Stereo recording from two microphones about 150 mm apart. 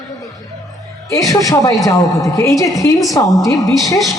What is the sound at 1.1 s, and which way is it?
A woman's voice, 20° left (ahead or behind).